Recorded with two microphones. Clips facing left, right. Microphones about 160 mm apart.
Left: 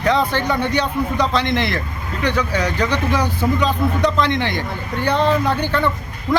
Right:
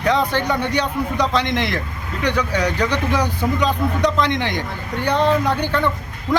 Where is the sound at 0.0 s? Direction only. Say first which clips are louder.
Left 1 dB; 10° right (ahead or behind).